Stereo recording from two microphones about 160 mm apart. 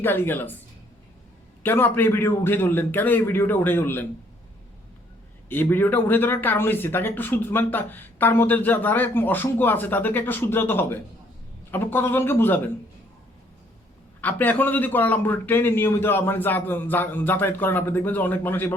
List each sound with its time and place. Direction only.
0.0 s speech: 15° left (ahead or behind)
1.6 s speech: 15° left (ahead or behind)
5.5 s speech: 10° left (ahead or behind)
14.2 s speech: 10° left (ahead or behind)